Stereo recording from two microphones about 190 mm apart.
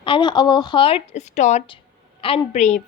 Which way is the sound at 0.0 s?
25° left (ahead or behind).